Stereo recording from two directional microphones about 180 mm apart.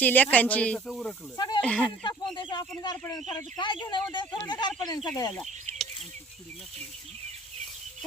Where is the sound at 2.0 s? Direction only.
25° left (ahead or behind).